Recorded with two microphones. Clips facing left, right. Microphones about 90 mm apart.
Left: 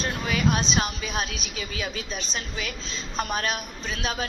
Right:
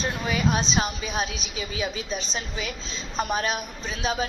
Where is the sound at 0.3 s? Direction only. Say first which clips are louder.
Even; 25° right (ahead or behind).